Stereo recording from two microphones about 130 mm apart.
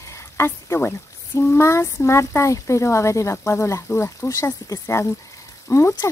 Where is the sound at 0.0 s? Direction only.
20° left (ahead or behind).